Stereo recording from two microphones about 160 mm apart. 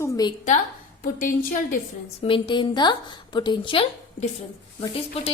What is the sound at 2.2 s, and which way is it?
A woman's voice, 30° left (ahead or behind).